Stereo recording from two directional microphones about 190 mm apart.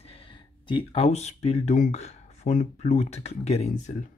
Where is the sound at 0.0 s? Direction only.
30° left (ahead or behind).